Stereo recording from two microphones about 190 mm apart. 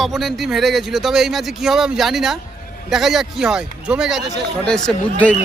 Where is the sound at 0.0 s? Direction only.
Centre (ahead or behind).